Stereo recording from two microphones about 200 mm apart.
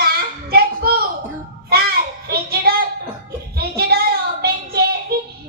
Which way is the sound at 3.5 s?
50° right (ahead or behind).